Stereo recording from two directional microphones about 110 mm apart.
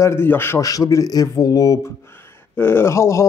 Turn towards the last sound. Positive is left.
turn(degrees=25)  # may be behind; listen again after turning